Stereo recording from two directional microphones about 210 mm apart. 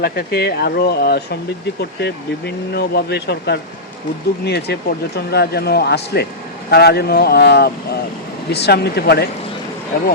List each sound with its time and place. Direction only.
0.0 s speech: 45° left (ahead or behind)